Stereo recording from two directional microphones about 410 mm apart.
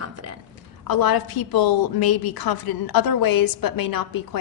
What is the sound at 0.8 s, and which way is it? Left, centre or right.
A woman's voice, left.